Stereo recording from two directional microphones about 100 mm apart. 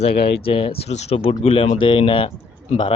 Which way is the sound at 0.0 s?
65° left (ahead or behind).